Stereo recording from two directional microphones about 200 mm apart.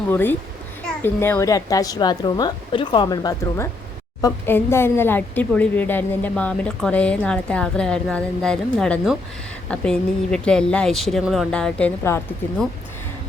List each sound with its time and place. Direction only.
0.1 s a woman's voice: 10° left (ahead or behind)